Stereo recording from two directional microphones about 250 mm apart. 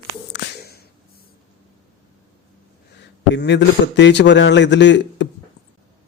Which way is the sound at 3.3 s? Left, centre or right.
Left.